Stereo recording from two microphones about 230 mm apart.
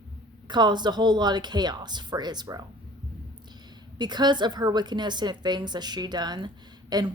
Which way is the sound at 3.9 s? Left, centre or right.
Centre.